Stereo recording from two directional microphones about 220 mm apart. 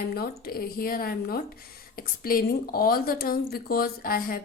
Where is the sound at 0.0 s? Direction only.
45° left (ahead or behind).